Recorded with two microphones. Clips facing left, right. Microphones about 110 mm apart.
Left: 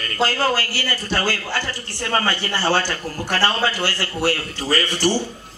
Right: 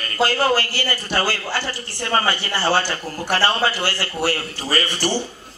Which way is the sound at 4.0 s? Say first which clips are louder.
Left 2 dB; 35° right (ahead or behind).